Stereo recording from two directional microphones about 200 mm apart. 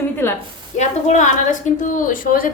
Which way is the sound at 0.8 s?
35° left (ahead or behind).